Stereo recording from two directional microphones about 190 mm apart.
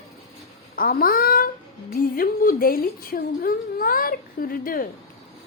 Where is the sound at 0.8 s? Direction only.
50° left (ahead or behind).